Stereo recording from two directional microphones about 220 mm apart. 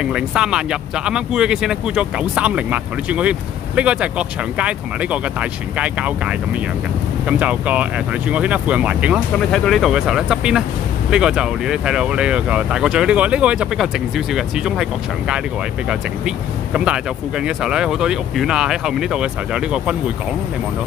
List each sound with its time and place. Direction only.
0.0 s speech: 5° right (ahead or behind)